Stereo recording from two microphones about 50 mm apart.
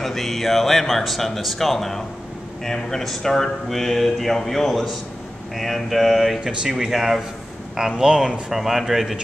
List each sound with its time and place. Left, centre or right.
0.0 s speech: centre
8.0 s speech: centre
8.5 s speech: centre